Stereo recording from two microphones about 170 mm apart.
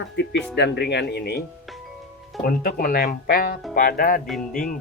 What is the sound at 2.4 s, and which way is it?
Speech, 65° left (ahead or behind).